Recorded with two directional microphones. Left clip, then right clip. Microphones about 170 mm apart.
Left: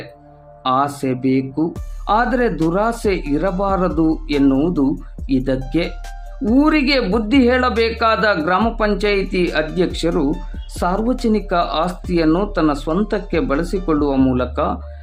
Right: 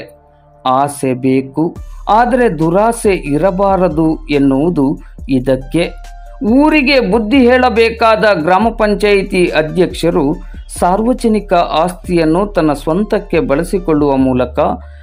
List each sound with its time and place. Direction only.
0.6 s a man's voice: 20° right (ahead or behind)